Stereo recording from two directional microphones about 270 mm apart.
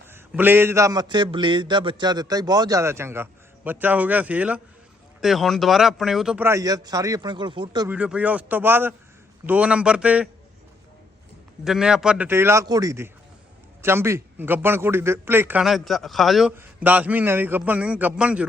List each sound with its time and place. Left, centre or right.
0.1 s a man's voice: centre
11.6 s a man's voice: centre